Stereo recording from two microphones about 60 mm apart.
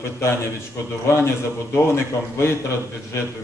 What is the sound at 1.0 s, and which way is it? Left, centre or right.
A man's voice, left.